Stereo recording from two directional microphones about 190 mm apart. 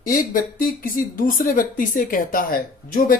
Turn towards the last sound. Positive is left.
turn(degrees=50)  # may be behind; listen again after turning